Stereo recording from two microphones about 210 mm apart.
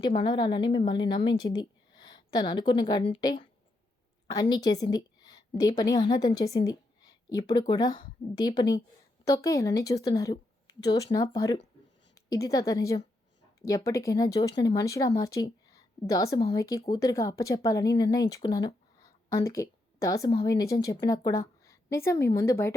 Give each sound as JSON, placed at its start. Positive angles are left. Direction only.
{"t": 0.0, "sound": "a woman's voice", "side_deg": 25}